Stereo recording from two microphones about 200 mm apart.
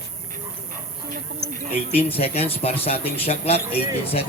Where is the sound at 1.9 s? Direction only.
30° left (ahead or behind).